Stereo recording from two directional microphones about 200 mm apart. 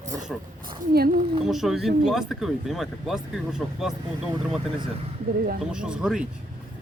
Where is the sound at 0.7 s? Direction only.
50° right (ahead or behind).